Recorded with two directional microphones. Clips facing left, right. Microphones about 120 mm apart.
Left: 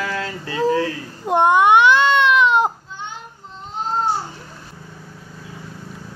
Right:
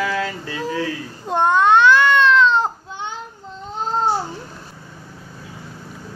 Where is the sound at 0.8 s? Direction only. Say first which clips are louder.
Left 1 dB; 15° left (ahead or behind).